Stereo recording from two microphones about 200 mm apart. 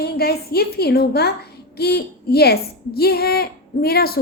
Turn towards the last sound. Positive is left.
turn(degrees=50)  # may be behind; listen again after turning